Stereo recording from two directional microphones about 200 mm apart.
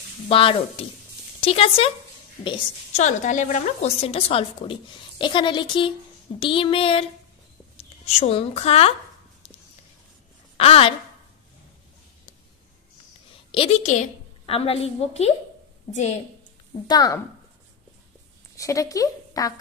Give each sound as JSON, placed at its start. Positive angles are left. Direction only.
{"t": 0.3, "sound": "speech", "side_deg": 30}
{"t": 3.0, "sound": "a woman's voice", "side_deg": 35}
{"t": 10.6, "sound": "speech", "side_deg": 30}
{"t": 13.5, "sound": "a woman's voice", "side_deg": 30}
{"t": 16.8, "sound": "speech", "side_deg": 20}
{"t": 18.6, "sound": "speech", "side_deg": 15}